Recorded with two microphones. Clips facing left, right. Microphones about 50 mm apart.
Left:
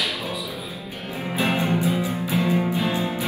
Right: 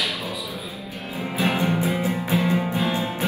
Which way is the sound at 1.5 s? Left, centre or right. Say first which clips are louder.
Left 2 dB; right.